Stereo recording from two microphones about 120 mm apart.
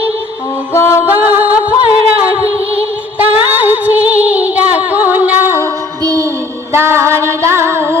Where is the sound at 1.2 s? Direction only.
15° right (ahead or behind).